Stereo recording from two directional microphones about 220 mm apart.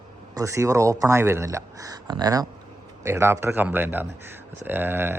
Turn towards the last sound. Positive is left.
turn(degrees=-10)  # may be behind; listen again after turning